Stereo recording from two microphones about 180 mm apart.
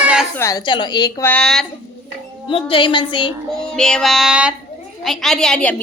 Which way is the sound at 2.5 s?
30° left (ahead or behind).